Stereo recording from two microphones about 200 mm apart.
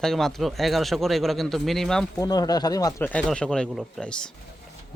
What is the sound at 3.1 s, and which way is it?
A man's voice, 5° left (ahead or behind).